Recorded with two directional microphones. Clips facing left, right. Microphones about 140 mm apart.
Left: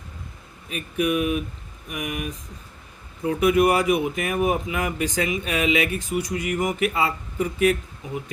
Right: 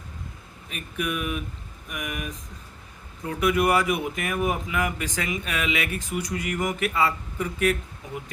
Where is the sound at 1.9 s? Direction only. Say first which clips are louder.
Left 4 dB; 25° left (ahead or behind).